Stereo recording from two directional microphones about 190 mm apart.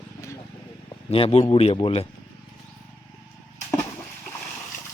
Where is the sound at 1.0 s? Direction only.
30° left (ahead or behind).